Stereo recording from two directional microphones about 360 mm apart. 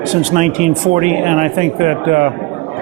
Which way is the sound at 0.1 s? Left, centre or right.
Centre.